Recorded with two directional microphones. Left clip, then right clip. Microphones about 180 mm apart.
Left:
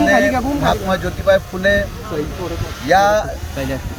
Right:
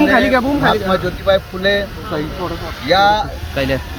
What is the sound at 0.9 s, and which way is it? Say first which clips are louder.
Speech: even; 30° left (ahead or behind).